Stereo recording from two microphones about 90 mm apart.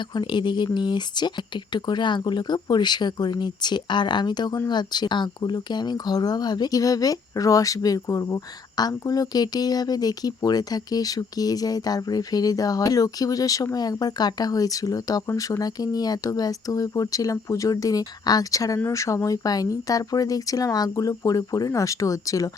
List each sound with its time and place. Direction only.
0.1 s speech: 60° left (ahead or behind); by 22.4 s 40° left (ahead or behind)